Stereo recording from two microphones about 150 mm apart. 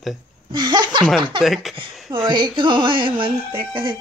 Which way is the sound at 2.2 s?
30° right (ahead or behind).